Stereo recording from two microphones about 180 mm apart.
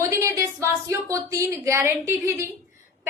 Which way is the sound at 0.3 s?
15° right (ahead or behind).